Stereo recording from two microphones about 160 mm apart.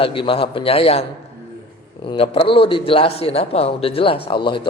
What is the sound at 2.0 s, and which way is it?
A man's voice, 35° left (ahead or behind).